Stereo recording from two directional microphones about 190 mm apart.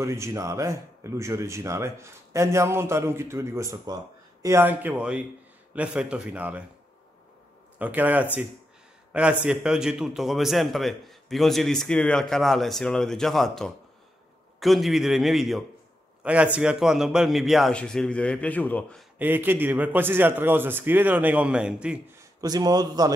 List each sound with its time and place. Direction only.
0.0 s speech: 15° right (ahead or behind)
7.8 s a man's voice: 10° right (ahead or behind)
19.1 s speech: 10° right (ahead or behind)
22.4 s a man's voice: 20° right (ahead or behind)